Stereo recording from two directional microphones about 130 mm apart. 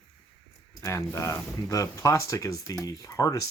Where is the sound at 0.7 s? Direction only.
25° left (ahead or behind).